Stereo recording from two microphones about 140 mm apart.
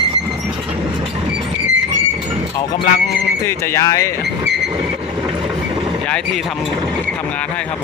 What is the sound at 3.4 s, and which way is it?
Speech, 20° left (ahead or behind).